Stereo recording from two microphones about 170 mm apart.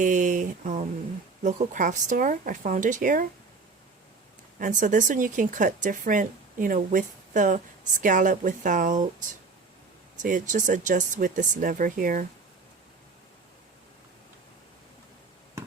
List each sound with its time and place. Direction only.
0.0 s speech: 50° right (ahead or behind)
4.6 s speech: 50° right (ahead or behind)
10.2 s speech: 50° right (ahead or behind)